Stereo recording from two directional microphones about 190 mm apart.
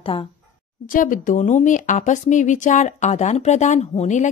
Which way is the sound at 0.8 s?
45° left (ahead or behind).